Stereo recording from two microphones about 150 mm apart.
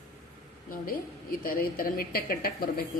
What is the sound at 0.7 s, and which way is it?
A woman's voice, 70° left (ahead or behind).